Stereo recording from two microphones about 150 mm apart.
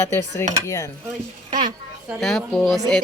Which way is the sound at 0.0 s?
20° left (ahead or behind).